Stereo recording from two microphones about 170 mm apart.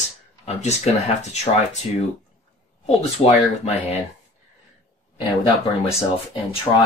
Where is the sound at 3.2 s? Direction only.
35° left (ahead or behind).